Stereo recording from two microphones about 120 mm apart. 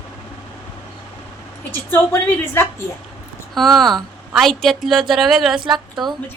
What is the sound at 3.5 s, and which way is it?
A woman's voice, centre (ahead or behind).